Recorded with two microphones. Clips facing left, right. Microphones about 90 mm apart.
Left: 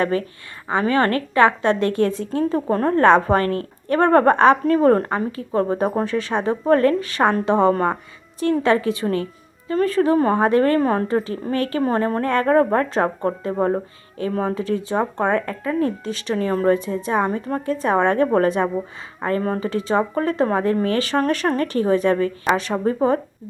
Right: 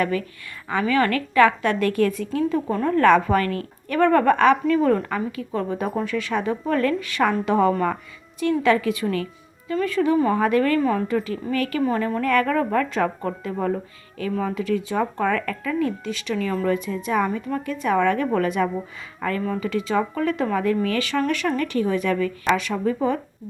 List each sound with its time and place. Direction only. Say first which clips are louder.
0.0 s a woman's voice: left 3 dB; 35° left (ahead or behind)
2.5 s a woman's voice: left 5 dB; 40° left (ahead or behind)